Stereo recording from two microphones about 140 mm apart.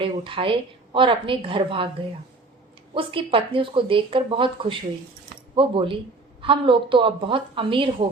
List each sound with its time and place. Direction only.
0.0 s speech: 40° right (ahead or behind)
2.9 s speech: 40° right (ahead or behind)